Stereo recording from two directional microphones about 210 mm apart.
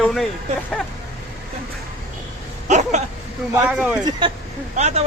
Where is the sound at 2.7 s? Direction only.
35° right (ahead or behind).